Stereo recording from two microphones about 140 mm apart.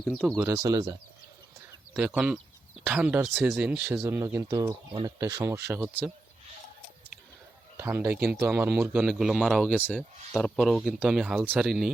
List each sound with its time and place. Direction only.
0.0 s speech: centre (ahead or behind)
0.3 s speech: 20° right (ahead or behind)
1.9 s speech: 5° right (ahead or behind)
7.8 s speech: 15° right (ahead or behind)
8.7 s speech: centre (ahead or behind)
9.6 s speech: 10° left (ahead or behind)
9.9 s speech: centre (ahead or behind)